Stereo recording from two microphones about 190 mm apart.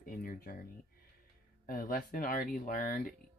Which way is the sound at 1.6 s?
50° left (ahead or behind).